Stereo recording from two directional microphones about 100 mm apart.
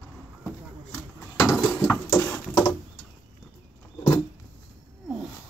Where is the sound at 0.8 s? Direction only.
10° left (ahead or behind).